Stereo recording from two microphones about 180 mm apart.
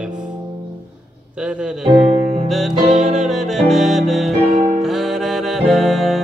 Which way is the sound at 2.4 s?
Centre (ahead or behind).